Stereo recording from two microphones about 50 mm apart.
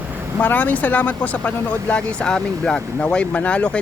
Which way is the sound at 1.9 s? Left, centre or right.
Centre.